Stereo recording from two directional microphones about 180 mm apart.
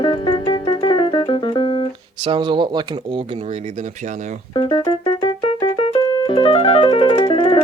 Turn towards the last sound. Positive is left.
turn(degrees=25)  # may be behind; listen again after turning